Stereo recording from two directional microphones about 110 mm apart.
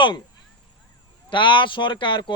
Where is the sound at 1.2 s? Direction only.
50° left (ahead or behind).